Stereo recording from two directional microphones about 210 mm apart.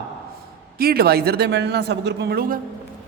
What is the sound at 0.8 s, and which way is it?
A man's voice, 45° right (ahead or behind).